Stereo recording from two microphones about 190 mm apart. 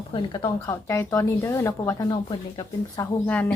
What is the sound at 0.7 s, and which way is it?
Speech, 15° left (ahead or behind).